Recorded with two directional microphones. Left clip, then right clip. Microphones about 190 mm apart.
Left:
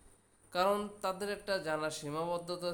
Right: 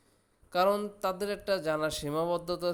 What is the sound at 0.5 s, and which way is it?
Speech, 25° right (ahead or behind).